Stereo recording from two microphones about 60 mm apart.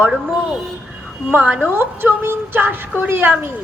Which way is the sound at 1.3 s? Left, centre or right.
Right.